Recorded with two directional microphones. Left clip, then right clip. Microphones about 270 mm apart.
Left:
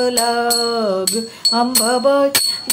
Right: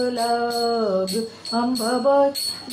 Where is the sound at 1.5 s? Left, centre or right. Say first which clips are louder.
Left 7 dB; left.